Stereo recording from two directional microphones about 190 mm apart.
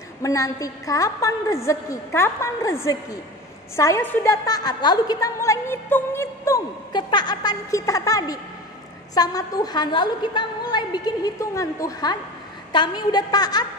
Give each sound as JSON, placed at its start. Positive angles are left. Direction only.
{"t": 0.2, "sound": "a woman's voice", "side_deg": 15}